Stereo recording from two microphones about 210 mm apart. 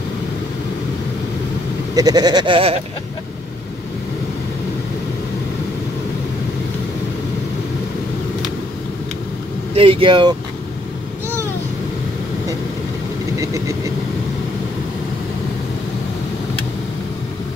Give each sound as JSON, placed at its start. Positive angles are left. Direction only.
{"t": 2.0, "sound": "speech", "side_deg": -20}
{"t": 9.8, "sound": "speech", "side_deg": -25}
{"t": 13.4, "sound": "vehicle", "side_deg": -15}